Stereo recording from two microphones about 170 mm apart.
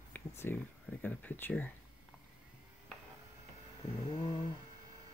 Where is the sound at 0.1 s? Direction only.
10° left (ahead or behind).